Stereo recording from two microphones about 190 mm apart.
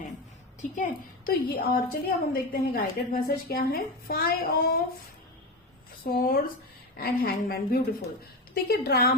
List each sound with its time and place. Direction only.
1.3 s a woman's voice: 50° left (ahead or behind)
6.1 s a woman's voice: 50° left (ahead or behind)